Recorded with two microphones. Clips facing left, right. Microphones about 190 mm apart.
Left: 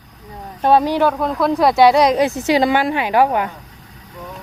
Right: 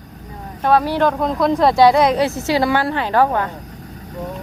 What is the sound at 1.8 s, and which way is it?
A woman's voice, 15° left (ahead or behind).